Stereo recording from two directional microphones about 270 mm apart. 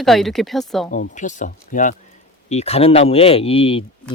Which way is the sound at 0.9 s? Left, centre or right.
Left.